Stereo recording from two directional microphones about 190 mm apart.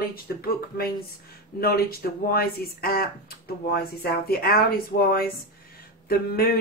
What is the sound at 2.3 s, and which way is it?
A woman's voice, 50° left (ahead or behind).